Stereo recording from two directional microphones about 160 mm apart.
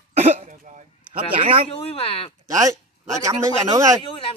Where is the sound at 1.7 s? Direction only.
35° left (ahead or behind).